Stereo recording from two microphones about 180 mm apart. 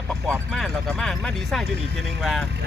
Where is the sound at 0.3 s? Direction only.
Centre (ahead or behind).